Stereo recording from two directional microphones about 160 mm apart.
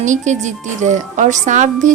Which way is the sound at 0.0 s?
50° right (ahead or behind).